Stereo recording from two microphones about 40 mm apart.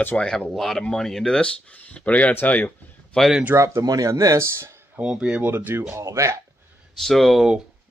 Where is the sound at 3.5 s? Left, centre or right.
Right.